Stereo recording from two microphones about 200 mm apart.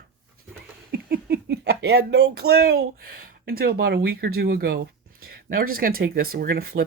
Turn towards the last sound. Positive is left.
turn(degrees=-50)  # may be behind; listen again after turning